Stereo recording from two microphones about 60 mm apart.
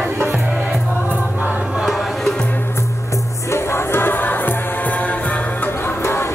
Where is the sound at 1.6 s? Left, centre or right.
Centre.